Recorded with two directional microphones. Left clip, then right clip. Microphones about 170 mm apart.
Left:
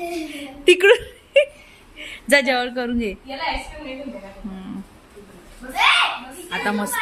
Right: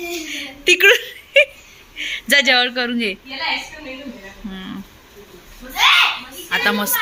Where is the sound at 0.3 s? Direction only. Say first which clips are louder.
Right 1 dB; 15° left (ahead or behind).